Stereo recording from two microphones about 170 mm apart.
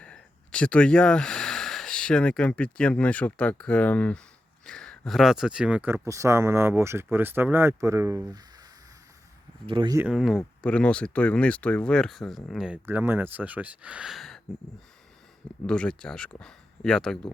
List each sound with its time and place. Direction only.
0.0 s speech: 5° left (ahead or behind); by 8.4 s 20° right (ahead or behind)
9.6 s speech: 25° right (ahead or behind)
10.0 s speech: 5° right (ahead or behind)
15.6 s speech: 5° left (ahead or behind)